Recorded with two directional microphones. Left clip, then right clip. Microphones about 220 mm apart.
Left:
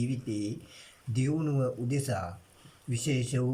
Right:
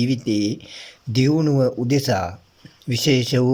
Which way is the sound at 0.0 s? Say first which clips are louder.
Right 13 dB; 35° right (ahead or behind).